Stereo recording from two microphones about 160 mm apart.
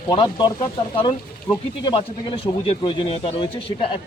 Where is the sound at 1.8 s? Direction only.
35° left (ahead or behind).